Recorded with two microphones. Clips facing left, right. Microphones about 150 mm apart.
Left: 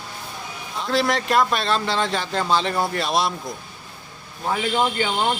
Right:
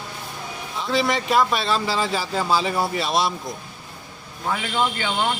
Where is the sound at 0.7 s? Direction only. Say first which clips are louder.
Left 1 dB; centre (ahead or behind).